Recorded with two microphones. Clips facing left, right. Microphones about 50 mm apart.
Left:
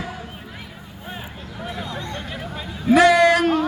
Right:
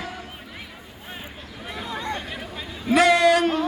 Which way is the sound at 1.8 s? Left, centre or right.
Centre.